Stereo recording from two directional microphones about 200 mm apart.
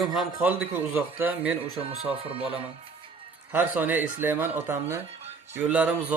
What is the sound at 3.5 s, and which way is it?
Speech, 10° right (ahead or behind).